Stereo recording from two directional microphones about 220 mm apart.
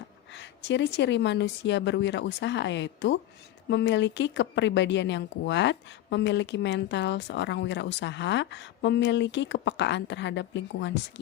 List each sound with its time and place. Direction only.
0.3 s speech: 55° left (ahead or behind)